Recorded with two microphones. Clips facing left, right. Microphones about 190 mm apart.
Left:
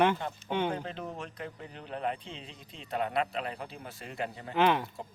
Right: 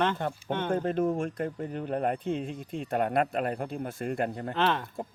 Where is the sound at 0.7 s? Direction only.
50° right (ahead or behind).